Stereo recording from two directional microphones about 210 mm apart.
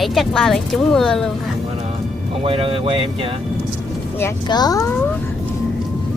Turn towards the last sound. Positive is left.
turn(degrees=15)  # may be behind; listen again after turning